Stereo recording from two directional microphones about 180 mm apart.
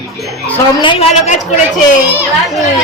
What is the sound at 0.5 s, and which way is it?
Speech, 30° left (ahead or behind).